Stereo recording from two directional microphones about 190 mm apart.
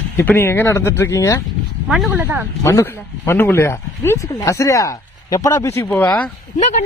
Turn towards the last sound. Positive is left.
turn(degrees=35)  # may be behind; listen again after turning